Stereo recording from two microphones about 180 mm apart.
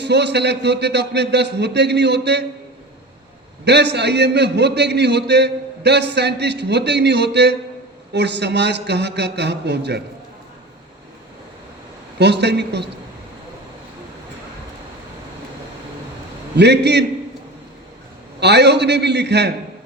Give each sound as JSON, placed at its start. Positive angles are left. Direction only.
{"t": 0.0, "sound": "a man's voice", "side_deg": -70}
{"t": 3.6, "sound": "a man's voice", "side_deg": -70}
{"t": 12.2, "sound": "a man's voice", "side_deg": -70}
{"t": 16.6, "sound": "a man's voice", "side_deg": -70}
{"t": 18.3, "sound": "a man's voice", "side_deg": -65}